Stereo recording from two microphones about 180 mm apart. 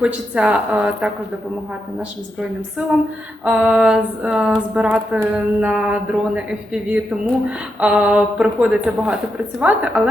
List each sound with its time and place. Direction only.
0.0 s speech: 5° right (ahead or behind)